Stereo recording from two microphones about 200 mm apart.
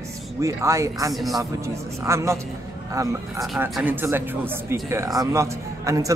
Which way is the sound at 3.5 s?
5° right (ahead or behind).